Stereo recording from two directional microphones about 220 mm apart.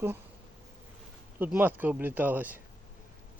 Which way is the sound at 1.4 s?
10° right (ahead or behind).